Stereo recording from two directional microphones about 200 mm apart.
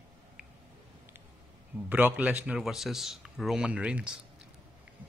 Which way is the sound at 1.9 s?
10° right (ahead or behind).